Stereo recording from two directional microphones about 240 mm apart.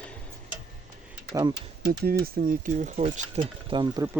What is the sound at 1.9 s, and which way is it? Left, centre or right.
Speech, right.